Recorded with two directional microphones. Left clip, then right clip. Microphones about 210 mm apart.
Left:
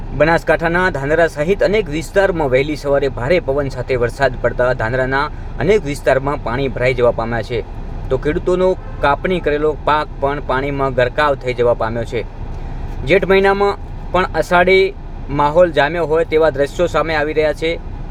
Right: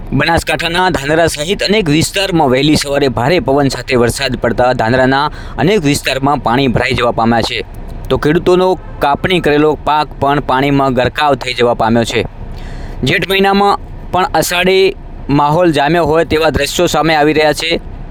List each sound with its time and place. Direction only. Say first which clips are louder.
0.2 s speech: even; 40° right (ahead or behind)
13.3 s speech: right 7 dB; 40° right (ahead or behind)